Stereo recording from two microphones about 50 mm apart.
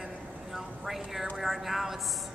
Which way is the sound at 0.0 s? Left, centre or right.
Centre.